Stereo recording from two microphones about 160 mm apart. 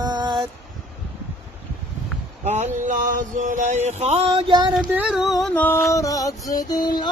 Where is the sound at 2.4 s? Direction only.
45° right (ahead or behind).